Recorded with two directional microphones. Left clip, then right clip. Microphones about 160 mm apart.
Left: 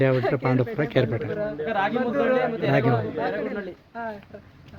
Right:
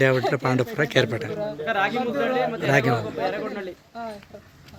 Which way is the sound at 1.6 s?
90° left.